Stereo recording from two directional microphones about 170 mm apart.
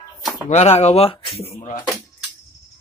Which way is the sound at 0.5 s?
40° left (ahead or behind).